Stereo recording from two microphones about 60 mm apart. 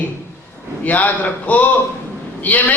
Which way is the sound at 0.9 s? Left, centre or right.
Left.